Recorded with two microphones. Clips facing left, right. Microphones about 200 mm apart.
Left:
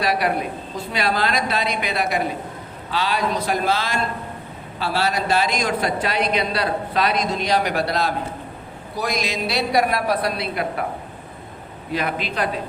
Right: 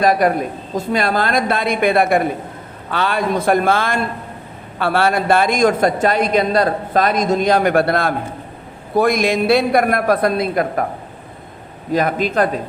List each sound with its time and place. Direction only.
0.0 s a man's voice: 45° right (ahead or behind)
11.9 s a man's voice: 45° right (ahead or behind)